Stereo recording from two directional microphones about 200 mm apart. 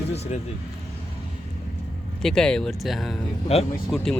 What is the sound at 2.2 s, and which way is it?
Speech, 5° left (ahead or behind).